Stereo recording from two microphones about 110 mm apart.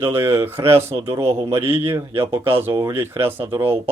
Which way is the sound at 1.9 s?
25° right (ahead or behind).